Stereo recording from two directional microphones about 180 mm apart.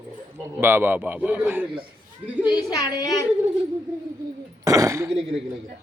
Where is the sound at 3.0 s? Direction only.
20° left (ahead or behind).